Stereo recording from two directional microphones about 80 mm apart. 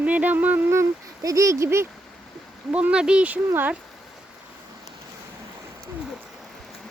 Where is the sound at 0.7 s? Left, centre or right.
Right.